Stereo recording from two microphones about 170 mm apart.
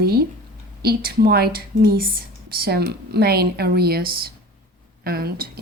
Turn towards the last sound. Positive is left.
turn(degrees=-65)  # may be behind; listen again after turning